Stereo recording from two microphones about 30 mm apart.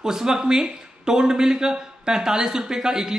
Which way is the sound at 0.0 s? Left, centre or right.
Centre.